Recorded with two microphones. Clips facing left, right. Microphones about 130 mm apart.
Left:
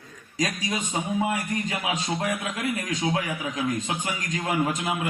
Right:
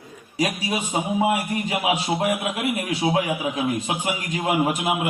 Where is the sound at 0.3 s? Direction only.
15° right (ahead or behind).